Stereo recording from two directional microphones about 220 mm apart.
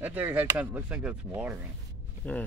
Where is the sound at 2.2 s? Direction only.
5° left (ahead or behind).